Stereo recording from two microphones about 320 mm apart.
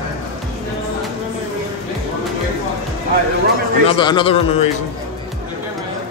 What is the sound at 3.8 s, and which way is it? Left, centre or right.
Speech, centre.